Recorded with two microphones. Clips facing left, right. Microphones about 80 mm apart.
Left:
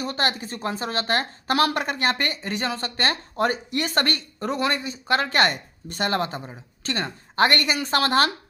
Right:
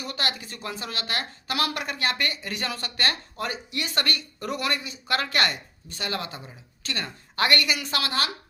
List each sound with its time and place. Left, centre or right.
0.0 s a woman's voice: left
3.3 s a woman's voice: left
5.9 s a woman's voice: left